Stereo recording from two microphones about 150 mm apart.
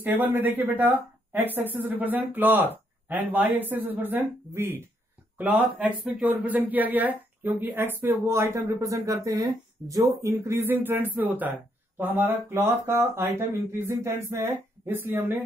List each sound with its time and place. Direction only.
0.0 s speech: 10° right (ahead or behind)